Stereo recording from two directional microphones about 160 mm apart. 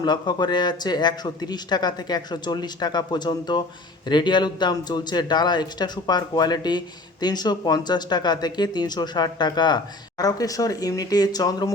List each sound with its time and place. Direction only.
0.0 s a man's voice: 25° left (ahead or behind)